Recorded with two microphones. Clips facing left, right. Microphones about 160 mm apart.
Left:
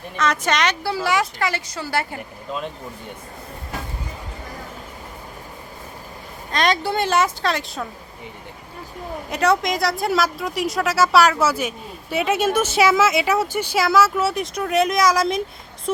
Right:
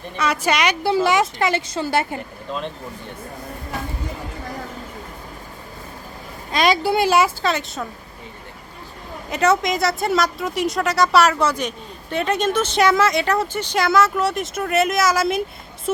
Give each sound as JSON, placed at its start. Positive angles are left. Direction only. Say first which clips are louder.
{"t": 0.2, "sound": "a woman's voice", "louder": "right 1 dB", "side_deg": -10}
{"t": 6.5, "sound": "speech", "louder": "right 3 dB", "side_deg": -10}
{"t": 9.3, "sound": "speech", "louder": "right 1 dB", "side_deg": 0}